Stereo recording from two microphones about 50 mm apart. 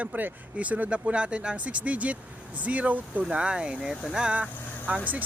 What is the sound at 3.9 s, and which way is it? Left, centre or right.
Speech, centre.